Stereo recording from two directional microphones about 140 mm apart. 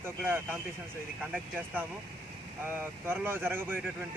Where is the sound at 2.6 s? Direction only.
15° right (ahead or behind).